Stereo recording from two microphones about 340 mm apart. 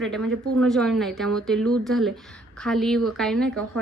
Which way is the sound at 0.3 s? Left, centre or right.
Right.